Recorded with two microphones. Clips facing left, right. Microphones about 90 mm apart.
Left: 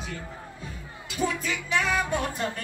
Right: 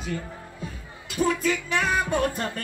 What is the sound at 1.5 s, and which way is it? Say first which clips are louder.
Music: right 3 dB; 45° right (ahead or behind).